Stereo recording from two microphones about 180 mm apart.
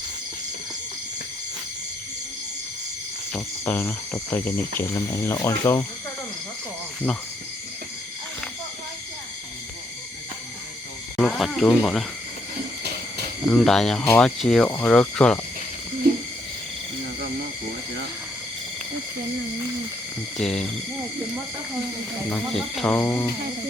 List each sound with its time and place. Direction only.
3.3 s speech: 10° left (ahead or behind)
11.2 s speech: centre (ahead or behind)
13.4 s speech: 5° left (ahead or behind)
16.1 s a sound: 60° right (ahead or behind)
20.4 s speech: 5° left (ahead or behind)
22.3 s speech: 5° left (ahead or behind)